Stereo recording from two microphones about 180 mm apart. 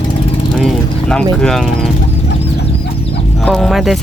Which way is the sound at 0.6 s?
5° left (ahead or behind).